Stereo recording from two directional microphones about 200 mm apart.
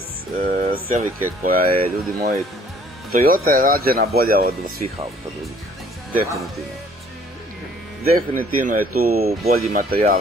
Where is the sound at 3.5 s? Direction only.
45° right (ahead or behind).